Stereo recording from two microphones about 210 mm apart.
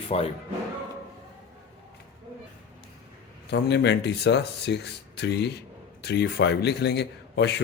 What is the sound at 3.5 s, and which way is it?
Speech, 55° left (ahead or behind).